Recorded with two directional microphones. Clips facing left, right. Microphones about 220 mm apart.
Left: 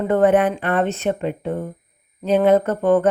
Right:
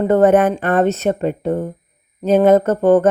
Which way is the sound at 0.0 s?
40° right (ahead or behind).